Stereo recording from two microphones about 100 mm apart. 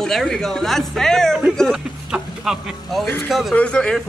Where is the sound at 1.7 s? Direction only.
5° right (ahead or behind).